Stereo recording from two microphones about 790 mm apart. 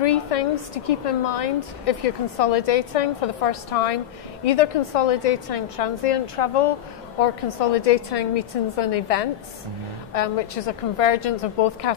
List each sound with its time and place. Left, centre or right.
0.0 s a woman's voice: left